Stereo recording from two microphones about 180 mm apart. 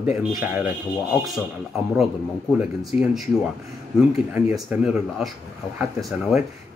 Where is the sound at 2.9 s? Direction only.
40° left (ahead or behind).